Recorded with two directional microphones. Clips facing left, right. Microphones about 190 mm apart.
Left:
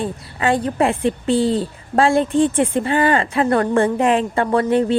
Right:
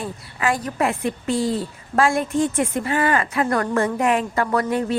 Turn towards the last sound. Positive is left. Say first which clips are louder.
# left 5 dB
turn(degrees=25)  # may be behind; listen again after turning